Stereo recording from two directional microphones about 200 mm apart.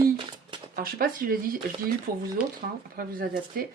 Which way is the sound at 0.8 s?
45° right (ahead or behind).